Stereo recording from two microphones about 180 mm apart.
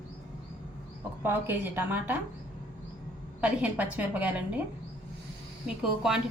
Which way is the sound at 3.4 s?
10° right (ahead or behind).